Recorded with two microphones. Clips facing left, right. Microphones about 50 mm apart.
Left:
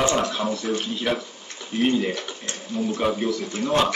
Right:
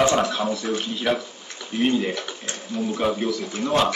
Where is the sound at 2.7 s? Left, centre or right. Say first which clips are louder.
Even; centre.